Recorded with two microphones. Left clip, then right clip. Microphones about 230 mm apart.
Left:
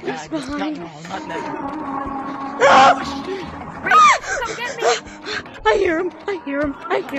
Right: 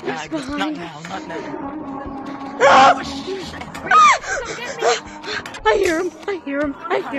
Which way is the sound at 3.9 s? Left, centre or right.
Centre.